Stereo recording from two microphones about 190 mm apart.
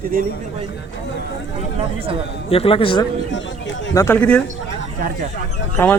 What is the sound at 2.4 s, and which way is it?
Speech, 30° left (ahead or behind).